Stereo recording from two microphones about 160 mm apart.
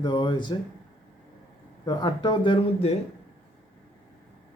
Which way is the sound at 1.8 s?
25° left (ahead or behind).